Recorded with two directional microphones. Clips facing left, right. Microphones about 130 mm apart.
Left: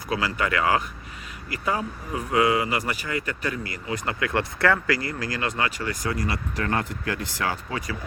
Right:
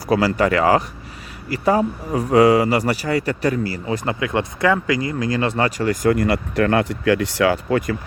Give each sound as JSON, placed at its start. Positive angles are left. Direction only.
{"t": 0.1, "sound": "speech", "side_deg": -35}